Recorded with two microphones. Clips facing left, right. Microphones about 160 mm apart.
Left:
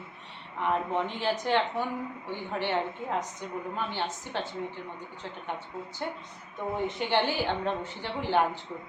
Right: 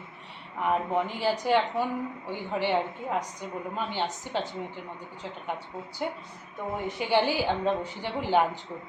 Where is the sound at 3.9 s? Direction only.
15° right (ahead or behind).